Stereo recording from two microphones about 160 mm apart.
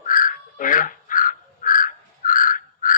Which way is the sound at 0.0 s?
60° left (ahead or behind).